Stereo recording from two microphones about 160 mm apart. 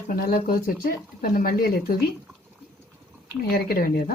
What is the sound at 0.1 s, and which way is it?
Speech, 65° left (ahead or behind).